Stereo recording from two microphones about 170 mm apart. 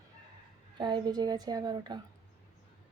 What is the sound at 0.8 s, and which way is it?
Speech, 25° right (ahead or behind).